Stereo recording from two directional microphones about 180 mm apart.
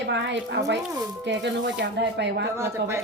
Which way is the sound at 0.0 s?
75° right (ahead or behind).